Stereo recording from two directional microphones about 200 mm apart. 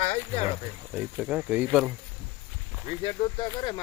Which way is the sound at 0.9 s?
5° right (ahead or behind).